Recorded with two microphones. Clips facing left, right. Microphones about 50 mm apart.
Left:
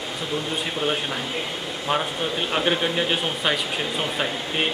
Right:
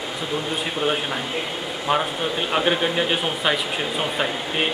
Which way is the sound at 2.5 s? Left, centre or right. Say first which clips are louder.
Right 2 dB; centre.